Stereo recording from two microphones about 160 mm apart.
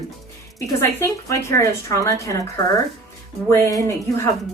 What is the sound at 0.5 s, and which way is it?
A woman's voice, 20° left (ahead or behind).